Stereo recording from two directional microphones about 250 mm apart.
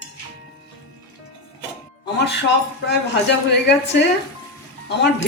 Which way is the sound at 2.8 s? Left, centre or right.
Left.